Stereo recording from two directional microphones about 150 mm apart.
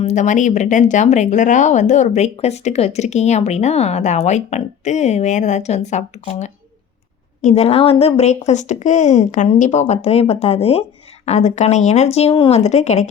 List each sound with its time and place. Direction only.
0.0 s speech: 50° left (ahead or behind)